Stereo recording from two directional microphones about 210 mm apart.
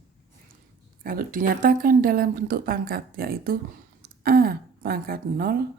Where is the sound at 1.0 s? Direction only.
40° right (ahead or behind).